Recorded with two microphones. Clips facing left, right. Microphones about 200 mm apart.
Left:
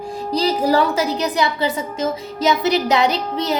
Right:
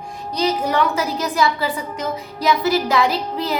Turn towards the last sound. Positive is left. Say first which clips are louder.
# left 2 dB
turn(degrees=25)  # may be behind; listen again after turning